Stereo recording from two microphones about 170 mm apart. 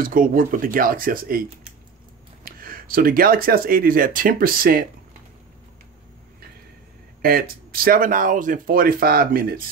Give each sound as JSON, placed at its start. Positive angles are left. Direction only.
{"t": 0.0, "sound": "speech", "side_deg": -55}
{"t": 7.2, "sound": "speech", "side_deg": -60}